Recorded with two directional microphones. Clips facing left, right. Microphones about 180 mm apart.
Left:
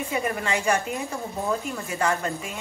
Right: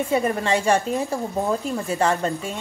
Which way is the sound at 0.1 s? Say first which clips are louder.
Right 5 dB; 30° right (ahead or behind).